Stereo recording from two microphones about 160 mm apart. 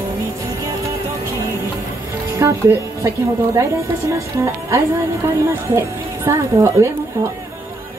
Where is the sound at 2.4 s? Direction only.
15° right (ahead or behind).